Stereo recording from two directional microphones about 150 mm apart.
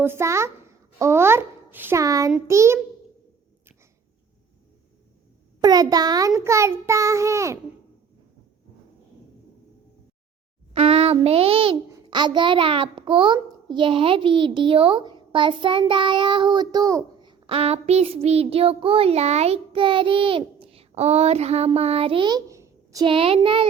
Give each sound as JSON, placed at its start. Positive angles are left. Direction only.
{"t": 0.0, "sound": "a child's voice", "side_deg": -15}
{"t": 5.6, "sound": "a child's voice", "side_deg": -25}
{"t": 10.8, "sound": "a child's voice", "side_deg": -40}
{"t": 23.0, "sound": "a child's voice", "side_deg": -35}